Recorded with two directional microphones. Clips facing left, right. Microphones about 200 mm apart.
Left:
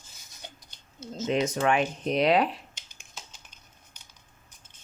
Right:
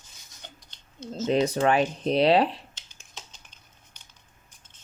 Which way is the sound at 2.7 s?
10° left (ahead or behind).